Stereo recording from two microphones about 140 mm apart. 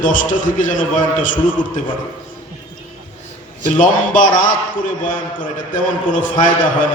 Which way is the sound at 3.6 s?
70° left (ahead or behind).